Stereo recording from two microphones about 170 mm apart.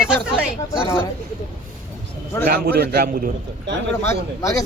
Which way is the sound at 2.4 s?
60° right (ahead or behind).